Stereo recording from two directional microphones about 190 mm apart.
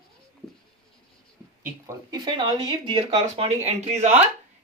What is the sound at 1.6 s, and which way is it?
Speech, 15° right (ahead or behind).